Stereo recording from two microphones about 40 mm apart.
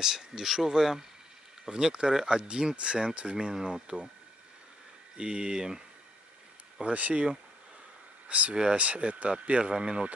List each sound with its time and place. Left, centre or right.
0.0 s speech: centre
5.1 s speech: right
6.8 s speech: right
8.3 s speech: right